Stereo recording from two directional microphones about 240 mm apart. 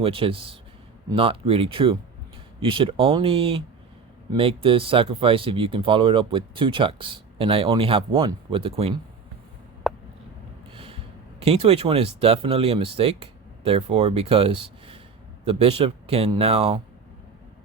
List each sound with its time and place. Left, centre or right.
0.0 s speech: right
9.8 s a sound: centre
10.7 s speech: right